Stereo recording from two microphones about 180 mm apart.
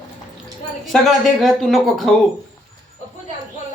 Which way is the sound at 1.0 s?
Centre (ahead or behind).